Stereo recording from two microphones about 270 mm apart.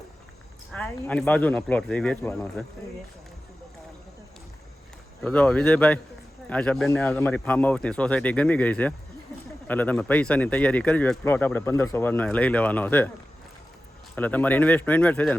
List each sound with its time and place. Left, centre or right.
0.7 s speech: centre
5.2 s speech: centre
14.2 s speech: centre